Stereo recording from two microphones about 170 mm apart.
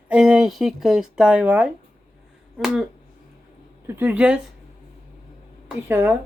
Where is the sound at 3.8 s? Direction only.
10° right (ahead or behind).